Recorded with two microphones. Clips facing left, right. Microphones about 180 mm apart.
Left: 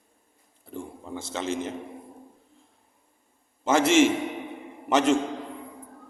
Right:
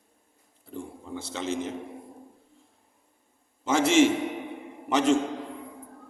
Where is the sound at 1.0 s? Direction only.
50° left (ahead or behind).